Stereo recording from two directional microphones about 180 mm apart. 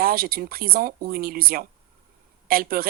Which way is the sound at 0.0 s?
55° right (ahead or behind).